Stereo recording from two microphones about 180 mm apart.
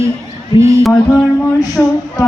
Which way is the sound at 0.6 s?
15° right (ahead or behind).